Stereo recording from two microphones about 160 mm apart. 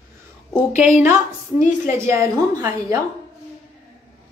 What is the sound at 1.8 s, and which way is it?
A woman's voice, 15° right (ahead or behind).